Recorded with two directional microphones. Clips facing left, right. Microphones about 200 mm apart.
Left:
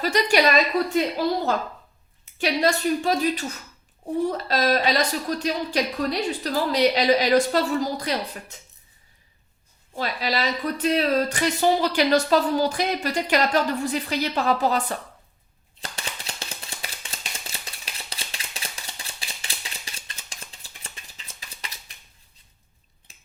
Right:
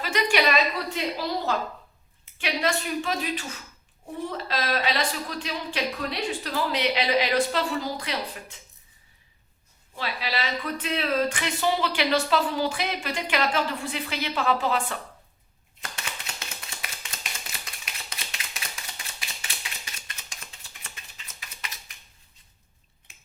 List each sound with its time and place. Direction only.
0.0 s a woman's voice: 40° left (ahead or behind)
2.4 s speech: 40° left (ahead or behind)
9.9 s speech: 40° left (ahead or behind)
15.8 s a sound: 30° left (ahead or behind)